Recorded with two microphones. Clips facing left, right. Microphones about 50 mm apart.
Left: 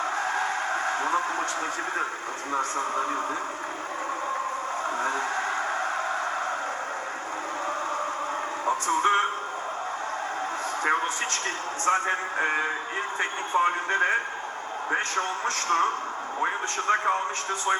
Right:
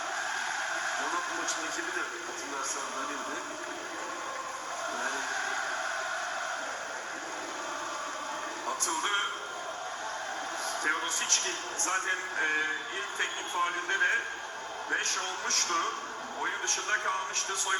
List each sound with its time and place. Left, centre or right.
0.2 s crowing: left
2.6 s a man's voice: left
4.9 s vehicle: left
8.6 s speech: left
10.8 s a man's voice: left